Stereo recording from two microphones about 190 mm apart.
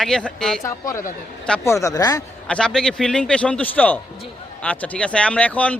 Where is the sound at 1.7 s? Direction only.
20° left (ahead or behind).